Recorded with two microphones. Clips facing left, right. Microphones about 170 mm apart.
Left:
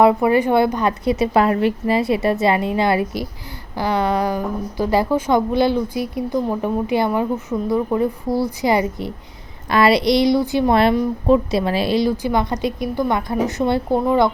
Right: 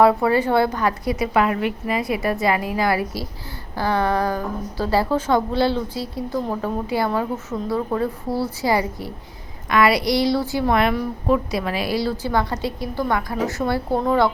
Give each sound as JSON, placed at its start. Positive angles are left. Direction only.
{"t": 0.0, "sound": "a woman's voice", "side_deg": 15}